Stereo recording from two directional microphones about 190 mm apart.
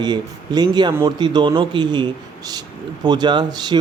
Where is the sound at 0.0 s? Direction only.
20° right (ahead or behind).